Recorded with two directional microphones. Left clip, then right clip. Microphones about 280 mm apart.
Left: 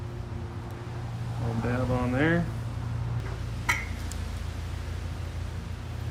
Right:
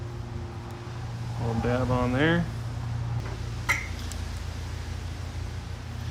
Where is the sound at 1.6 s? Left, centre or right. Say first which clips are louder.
Right 3 dB; centre.